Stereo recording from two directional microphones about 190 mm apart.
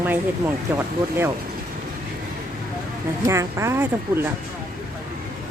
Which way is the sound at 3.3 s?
15° right (ahead or behind).